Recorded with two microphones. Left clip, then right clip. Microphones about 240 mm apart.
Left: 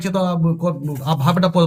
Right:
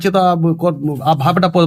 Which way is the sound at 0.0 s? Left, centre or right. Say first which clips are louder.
Right 8 dB; centre.